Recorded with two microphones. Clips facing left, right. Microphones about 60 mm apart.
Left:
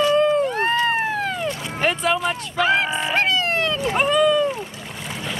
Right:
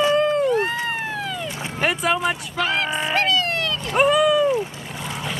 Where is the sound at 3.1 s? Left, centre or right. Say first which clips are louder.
Left 1 dB; left.